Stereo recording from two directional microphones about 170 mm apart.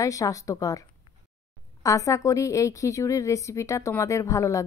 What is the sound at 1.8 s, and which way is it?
Speech, 20° left (ahead or behind).